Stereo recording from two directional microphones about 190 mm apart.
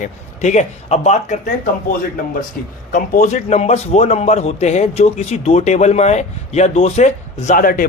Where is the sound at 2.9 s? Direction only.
45° left (ahead or behind).